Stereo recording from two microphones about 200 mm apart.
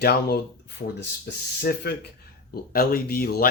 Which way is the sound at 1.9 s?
55° left (ahead or behind).